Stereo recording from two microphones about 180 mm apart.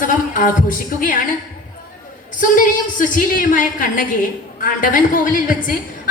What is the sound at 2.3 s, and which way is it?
A woman's voice, 45° left (ahead or behind).